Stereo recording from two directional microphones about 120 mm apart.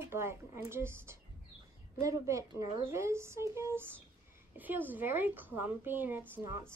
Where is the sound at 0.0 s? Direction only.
20° right (ahead or behind).